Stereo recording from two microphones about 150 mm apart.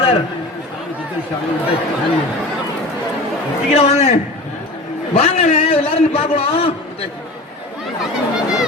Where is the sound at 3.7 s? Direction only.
45° left (ahead or behind).